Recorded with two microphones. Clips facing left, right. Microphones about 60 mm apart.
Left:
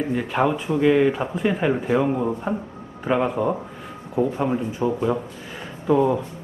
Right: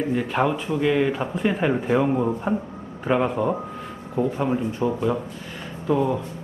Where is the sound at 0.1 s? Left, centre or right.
Centre.